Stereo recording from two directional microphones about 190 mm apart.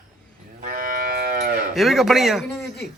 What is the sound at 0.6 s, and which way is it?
Moo, 45° right (ahead or behind).